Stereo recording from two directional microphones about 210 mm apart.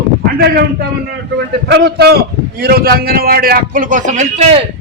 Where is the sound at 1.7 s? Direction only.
50° right (ahead or behind); by 4.6 s 30° right (ahead or behind).